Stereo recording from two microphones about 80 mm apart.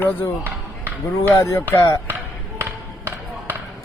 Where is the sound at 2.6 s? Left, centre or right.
Right.